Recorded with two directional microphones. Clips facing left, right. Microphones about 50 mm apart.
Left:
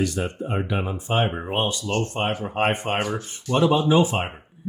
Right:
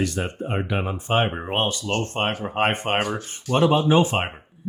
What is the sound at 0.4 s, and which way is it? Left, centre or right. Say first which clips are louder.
Speech: right 2 dB; right.